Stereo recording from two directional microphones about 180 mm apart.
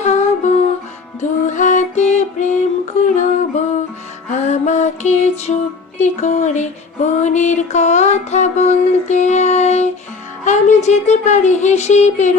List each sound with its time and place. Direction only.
0.0 s music: 40° left (ahead or behind)
10.4 s speech: 40° left (ahead or behind)